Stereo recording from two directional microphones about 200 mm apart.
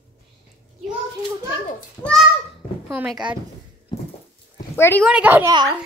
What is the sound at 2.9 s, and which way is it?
Speech, 5° right (ahead or behind).